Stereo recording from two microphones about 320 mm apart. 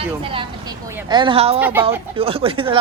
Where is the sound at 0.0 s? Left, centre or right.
Centre.